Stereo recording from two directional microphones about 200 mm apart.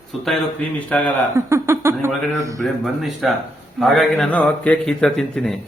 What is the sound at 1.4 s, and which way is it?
Speech, 15° right (ahead or behind).